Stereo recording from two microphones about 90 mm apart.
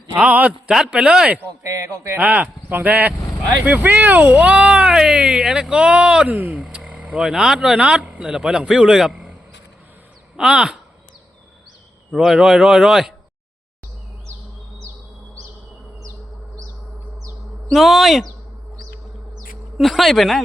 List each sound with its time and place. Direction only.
0.2 s speech: 15° right (ahead or behind)
1.6 s a man's voice: 35° right (ahead or behind)
2.1 s speech: 20° right (ahead or behind)
10.3 s speech: 10° right (ahead or behind)
12.1 s speech: centre (ahead or behind)
17.7 s speech: centre (ahead or behind)
19.8 s speech: centre (ahead or behind)